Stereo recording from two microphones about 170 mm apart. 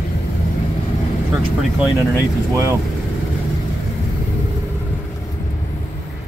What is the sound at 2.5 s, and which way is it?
Speech, 15° right (ahead or behind).